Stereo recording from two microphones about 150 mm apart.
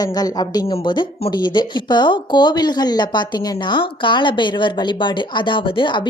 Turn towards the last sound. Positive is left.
turn(degrees=30)  # may be behind; listen again after turning